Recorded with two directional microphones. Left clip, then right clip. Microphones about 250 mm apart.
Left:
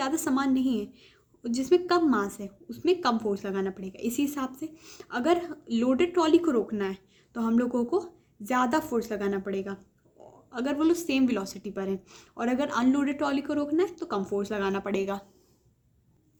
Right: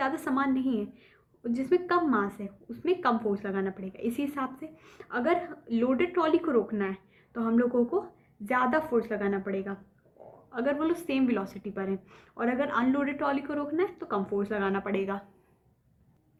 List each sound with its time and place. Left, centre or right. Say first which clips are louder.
0.0 s a woman's voice: left 1 dB; left